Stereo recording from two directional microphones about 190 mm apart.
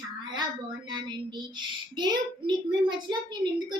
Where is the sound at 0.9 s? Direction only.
25° right (ahead or behind).